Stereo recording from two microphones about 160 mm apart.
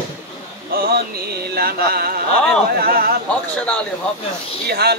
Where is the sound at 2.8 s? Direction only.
70° right (ahead or behind).